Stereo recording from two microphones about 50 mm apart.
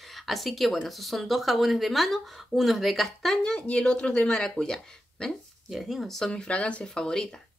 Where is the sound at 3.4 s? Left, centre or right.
Centre.